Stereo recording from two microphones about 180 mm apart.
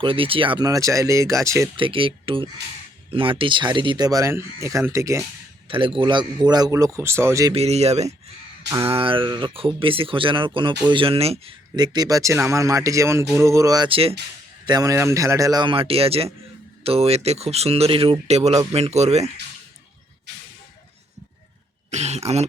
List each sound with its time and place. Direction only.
0.0 s speech: 30° right (ahead or behind)
1.7 s speech: 30° right (ahead or behind)
5.6 s speech: 30° right (ahead or behind)
7.5 s speech: 35° right (ahead or behind)
11.8 s speech: 20° right (ahead or behind)
14.7 s speech: 20° right (ahead or behind); by 19.3 s 40° right (ahead or behind)
21.8 s speech: 40° right (ahead or behind)